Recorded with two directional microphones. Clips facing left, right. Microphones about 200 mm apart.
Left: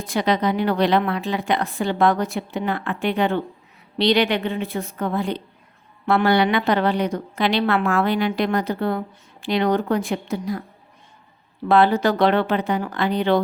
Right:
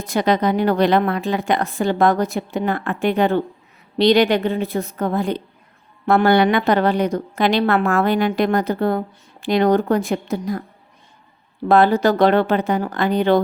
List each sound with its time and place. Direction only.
0.0 s a woman's voice: 45° right (ahead or behind)
11.7 s a woman's voice: 45° right (ahead or behind)